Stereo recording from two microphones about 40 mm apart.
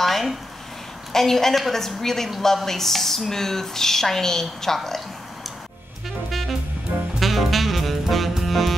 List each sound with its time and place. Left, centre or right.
0.0 s a sound: centre
1.1 s speech: centre
7.2 s saxophone: centre